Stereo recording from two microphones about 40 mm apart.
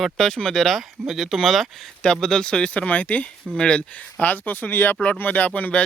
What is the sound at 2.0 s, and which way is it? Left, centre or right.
Speech, centre.